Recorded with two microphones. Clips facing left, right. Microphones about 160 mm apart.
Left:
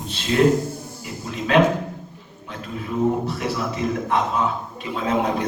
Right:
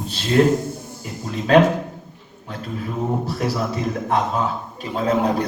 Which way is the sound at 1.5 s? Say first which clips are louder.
Right 3 dB; 35° right (ahead or behind).